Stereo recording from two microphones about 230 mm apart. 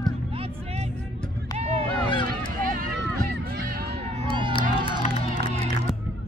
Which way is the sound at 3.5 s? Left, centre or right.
Right.